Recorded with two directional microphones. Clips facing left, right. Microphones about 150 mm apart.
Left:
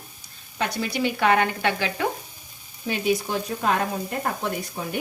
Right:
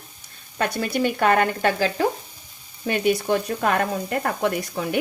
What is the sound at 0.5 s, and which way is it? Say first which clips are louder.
Speech: right 3 dB; 55° right (ahead or behind).